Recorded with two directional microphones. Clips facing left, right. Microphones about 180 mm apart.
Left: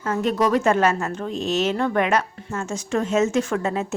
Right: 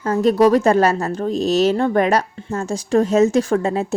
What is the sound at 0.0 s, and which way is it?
A woman's voice, 35° right (ahead or behind).